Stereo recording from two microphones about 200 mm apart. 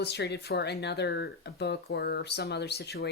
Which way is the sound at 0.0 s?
55° left (ahead or behind).